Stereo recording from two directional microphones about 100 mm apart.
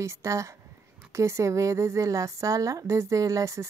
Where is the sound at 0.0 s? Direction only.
30° right (ahead or behind).